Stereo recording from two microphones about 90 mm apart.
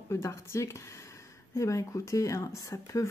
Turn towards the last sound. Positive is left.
turn(degrees=35)  # may be behind; listen again after turning